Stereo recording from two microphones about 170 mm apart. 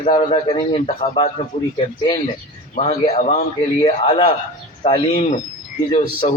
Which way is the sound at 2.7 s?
40° left (ahead or behind).